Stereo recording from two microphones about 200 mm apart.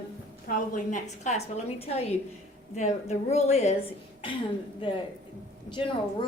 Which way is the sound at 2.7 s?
35° left (ahead or behind).